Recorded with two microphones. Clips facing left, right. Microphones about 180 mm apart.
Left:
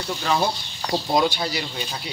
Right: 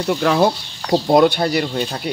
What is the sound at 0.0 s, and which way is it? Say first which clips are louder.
Speech: right 8 dB; 65° right (ahead or behind).